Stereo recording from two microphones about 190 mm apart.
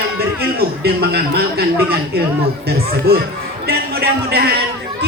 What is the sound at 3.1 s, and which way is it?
Speech, 55° right (ahead or behind).